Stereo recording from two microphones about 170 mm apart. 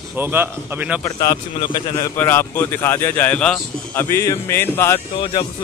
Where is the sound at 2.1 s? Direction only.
15° left (ahead or behind).